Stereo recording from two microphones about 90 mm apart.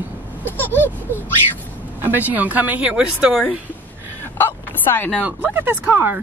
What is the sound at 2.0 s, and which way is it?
Speech, 20° right (ahead or behind).